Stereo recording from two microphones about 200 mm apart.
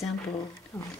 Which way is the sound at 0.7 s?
15° left (ahead or behind).